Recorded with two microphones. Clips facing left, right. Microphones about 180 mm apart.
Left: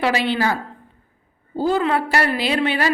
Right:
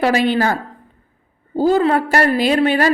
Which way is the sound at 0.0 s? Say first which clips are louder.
Right 4 dB; 45° right (ahead or behind).